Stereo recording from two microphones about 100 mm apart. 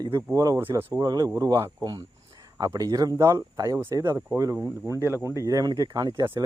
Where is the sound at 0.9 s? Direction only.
40° right (ahead or behind).